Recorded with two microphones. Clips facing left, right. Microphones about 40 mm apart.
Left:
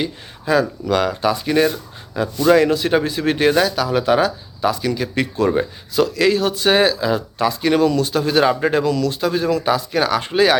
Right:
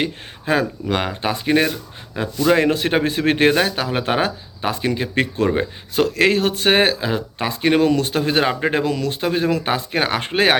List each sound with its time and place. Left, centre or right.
0.0 s speech: right
8.8 s speech: right